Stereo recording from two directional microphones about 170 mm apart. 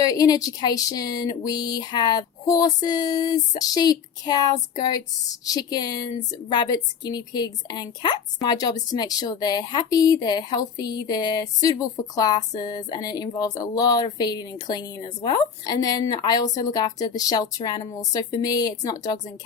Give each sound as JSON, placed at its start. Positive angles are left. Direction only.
{"t": 0.0, "sound": "a woman's voice", "side_deg": 20}